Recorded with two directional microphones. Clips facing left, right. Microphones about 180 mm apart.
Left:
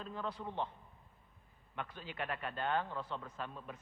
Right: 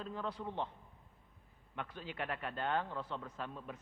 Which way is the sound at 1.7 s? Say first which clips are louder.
Right 1 dB; 15° right (ahead or behind).